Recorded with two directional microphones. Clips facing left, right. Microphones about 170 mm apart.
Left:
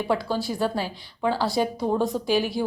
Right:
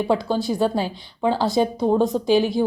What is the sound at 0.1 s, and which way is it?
A woman's voice, 25° right (ahead or behind).